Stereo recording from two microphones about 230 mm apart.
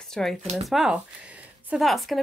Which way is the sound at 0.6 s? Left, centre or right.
Centre.